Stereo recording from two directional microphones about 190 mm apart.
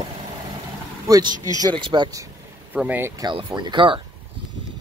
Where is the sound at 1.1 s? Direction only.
20° right (ahead or behind).